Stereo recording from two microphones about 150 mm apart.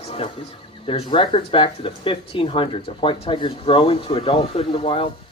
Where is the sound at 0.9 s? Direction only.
35° left (ahead or behind).